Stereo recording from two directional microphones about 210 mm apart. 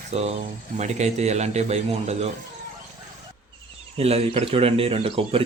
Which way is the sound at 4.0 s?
30° right (ahead or behind).